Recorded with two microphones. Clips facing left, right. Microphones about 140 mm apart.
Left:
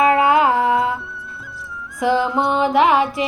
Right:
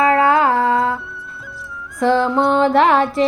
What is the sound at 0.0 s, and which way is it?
Music, 20° left (ahead or behind).